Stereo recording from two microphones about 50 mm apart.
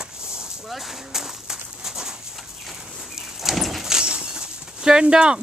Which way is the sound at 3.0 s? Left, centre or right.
Centre.